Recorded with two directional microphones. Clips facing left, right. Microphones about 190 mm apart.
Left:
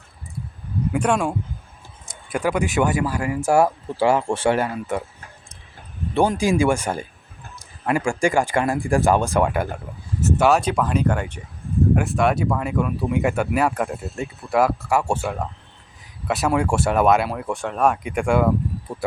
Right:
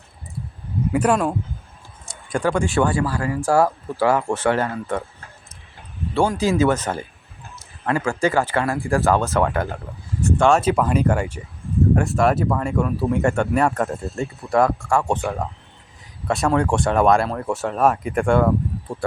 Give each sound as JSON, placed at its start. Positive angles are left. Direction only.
{"t": 0.9, "sound": "speech", "side_deg": -5}
{"t": 2.3, "sound": "speech", "side_deg": 5}
{"t": 2.8, "sound": "speech", "side_deg": 20}
{"t": 4.4, "sound": "speech", "side_deg": 15}
{"t": 6.1, "sound": "speech", "side_deg": 15}
{"t": 10.6, "sound": "speech", "side_deg": -5}